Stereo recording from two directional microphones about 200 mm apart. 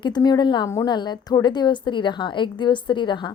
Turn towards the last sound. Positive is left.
turn(degrees=20)  # may be behind; listen again after turning